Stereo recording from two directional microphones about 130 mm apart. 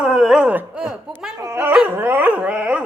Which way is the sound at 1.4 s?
20° right (ahead or behind).